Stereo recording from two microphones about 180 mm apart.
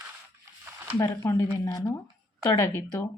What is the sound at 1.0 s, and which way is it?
Speech, 15° left (ahead or behind).